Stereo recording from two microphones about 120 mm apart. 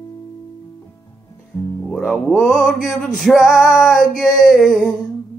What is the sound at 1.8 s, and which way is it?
Speech, centre (ahead or behind).